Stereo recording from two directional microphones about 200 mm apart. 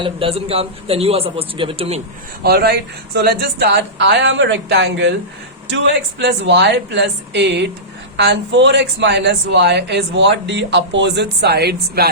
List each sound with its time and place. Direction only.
0.0 s a man's voice: 30° right (ahead or behind)
2.4 s speech: 50° right (ahead or behind)